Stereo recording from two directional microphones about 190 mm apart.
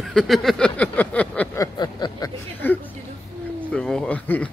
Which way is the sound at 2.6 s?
10° left (ahead or behind).